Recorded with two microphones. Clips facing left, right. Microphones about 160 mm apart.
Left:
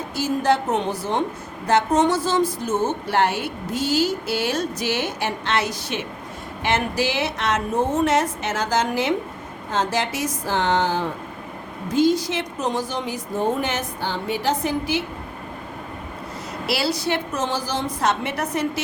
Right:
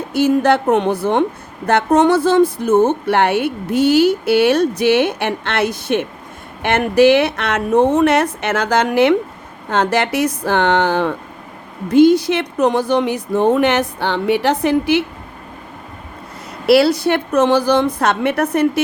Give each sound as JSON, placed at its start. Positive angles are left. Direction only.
{"t": 0.1, "sound": "a woman's voice", "side_deg": -60}
{"t": 16.6, "sound": "speech", "side_deg": -60}